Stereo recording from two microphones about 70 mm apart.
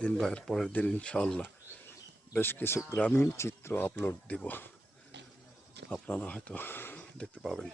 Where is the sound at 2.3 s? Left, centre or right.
Left.